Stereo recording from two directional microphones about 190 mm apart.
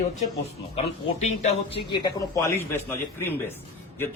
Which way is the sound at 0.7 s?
35° left (ahead or behind).